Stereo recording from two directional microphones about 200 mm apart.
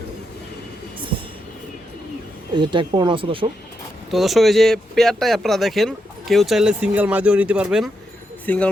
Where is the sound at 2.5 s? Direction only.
25° right (ahead or behind).